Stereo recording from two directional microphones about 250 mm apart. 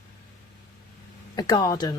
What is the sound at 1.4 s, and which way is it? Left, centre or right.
Speech, centre.